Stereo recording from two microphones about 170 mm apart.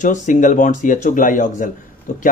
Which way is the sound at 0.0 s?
45° left (ahead or behind).